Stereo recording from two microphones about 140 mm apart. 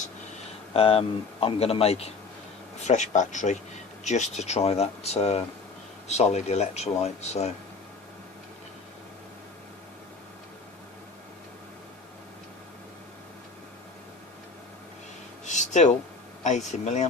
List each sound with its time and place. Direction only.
0.7 s a man's voice: 40° left (ahead or behind)
2.8 s a man's voice: 55° left (ahead or behind)
15.4 s a sound: 60° left (ahead or behind)
16.4 s speech: 55° left (ahead or behind)